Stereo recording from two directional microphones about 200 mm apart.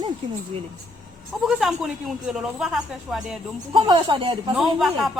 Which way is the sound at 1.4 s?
Centre (ahead or behind).